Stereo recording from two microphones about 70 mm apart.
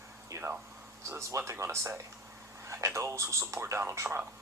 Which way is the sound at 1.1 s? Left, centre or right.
Right.